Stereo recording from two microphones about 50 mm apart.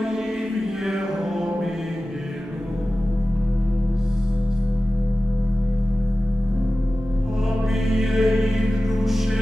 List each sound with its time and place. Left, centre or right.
0.0 s music: centre
7.9 s music: centre